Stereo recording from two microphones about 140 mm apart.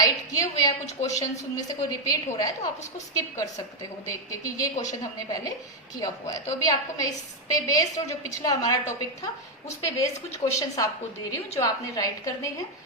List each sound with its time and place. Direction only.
0.0 s a woman's voice: 25° left (ahead or behind)